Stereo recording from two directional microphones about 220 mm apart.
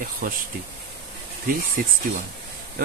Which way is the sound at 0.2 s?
40° right (ahead or behind).